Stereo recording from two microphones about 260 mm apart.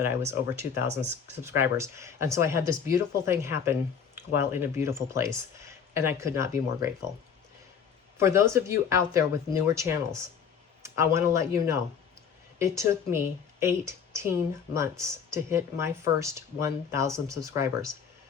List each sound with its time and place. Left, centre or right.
0.3 s a woman's voice: centre
8.2 s a woman's voice: centre